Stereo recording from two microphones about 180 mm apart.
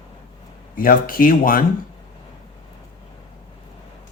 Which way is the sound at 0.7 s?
50° left (ahead or behind).